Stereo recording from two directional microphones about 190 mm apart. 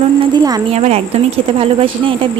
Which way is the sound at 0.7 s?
35° right (ahead or behind).